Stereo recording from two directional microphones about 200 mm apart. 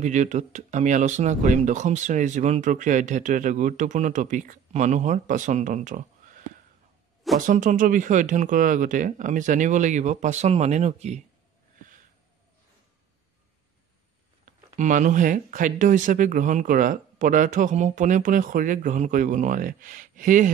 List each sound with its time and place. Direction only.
0.0 s speech: 35° right (ahead or behind)
7.3 s speech: 40° right (ahead or behind)
14.8 s speech: 40° right (ahead or behind)